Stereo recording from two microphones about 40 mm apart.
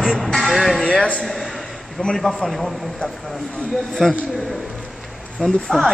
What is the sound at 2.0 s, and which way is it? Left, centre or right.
Speech, centre.